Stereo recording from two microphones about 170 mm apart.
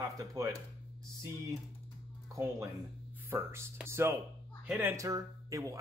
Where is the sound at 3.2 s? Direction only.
15° right (ahead or behind).